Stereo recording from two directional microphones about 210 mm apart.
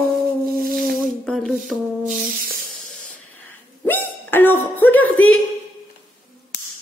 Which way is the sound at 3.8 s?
10° left (ahead or behind).